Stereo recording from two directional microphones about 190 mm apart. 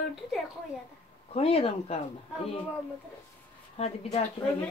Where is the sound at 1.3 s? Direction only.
30° left (ahead or behind).